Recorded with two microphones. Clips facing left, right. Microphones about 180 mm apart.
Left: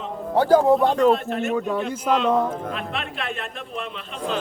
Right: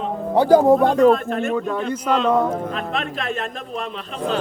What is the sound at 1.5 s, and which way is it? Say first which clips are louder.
Speech: right 1 dB; 5° left (ahead or behind).